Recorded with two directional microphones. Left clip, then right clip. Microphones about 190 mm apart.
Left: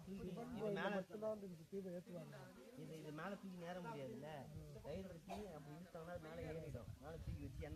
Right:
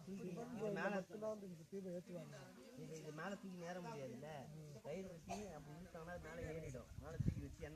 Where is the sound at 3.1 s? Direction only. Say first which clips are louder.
Right 1 dB; 20° right (ahead or behind).